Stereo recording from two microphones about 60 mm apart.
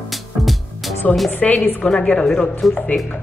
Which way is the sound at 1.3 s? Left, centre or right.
Left.